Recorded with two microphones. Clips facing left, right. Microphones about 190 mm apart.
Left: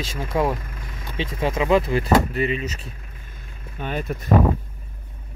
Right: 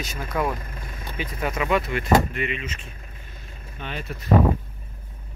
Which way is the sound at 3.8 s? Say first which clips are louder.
Left 6 dB; 50° left (ahead or behind).